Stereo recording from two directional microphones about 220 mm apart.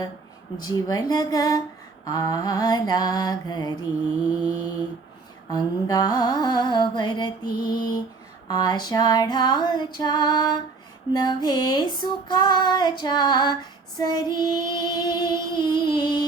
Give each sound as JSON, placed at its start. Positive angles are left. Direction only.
{"t": 0.5, "sound": "mantra", "side_deg": 20}
{"t": 5.5, "sound": "music", "side_deg": 20}